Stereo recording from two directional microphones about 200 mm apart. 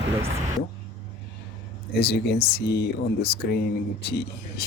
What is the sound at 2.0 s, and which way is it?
Speech, 55° left (ahead or behind).